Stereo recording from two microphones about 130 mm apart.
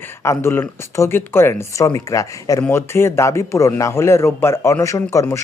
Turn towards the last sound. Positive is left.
turn(degrees=20)  # may be behind; listen again after turning